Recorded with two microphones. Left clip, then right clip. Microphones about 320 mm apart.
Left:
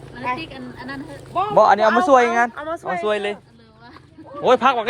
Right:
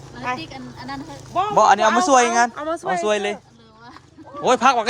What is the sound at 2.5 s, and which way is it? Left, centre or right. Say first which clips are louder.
Speech: right 2 dB; right.